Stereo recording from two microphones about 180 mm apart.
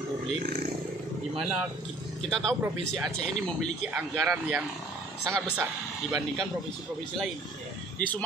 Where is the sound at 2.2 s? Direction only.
Centre (ahead or behind).